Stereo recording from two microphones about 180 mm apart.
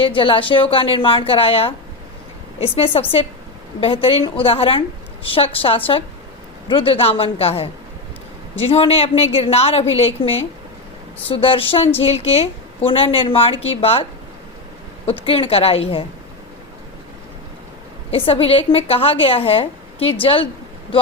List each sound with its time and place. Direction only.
0.0 s a woman's voice: 30° left (ahead or behind)
11.3 s a woman's voice: 30° left (ahead or behind)
18.1 s a woman's voice: 30° left (ahead or behind)